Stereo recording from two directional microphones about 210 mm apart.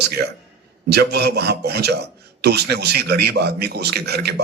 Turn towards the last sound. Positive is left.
turn(degrees=-50)  # may be behind; listen again after turning